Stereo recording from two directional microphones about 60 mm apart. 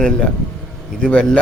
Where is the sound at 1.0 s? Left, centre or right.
Centre.